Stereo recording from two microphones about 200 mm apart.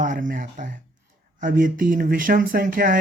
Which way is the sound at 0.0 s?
40° right (ahead or behind).